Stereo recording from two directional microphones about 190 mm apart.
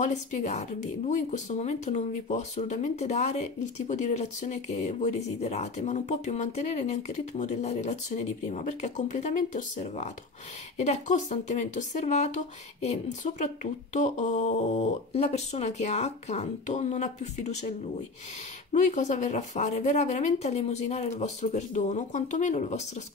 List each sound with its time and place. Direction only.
0.0 s speech: 40° left (ahead or behind)
18.7 s speech: 40° left (ahead or behind)